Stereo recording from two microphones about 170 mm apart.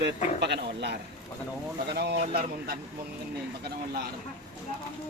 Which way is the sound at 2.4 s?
60° right (ahead or behind).